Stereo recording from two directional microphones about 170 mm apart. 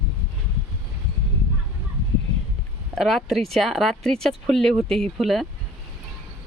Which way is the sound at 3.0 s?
Centre (ahead or behind).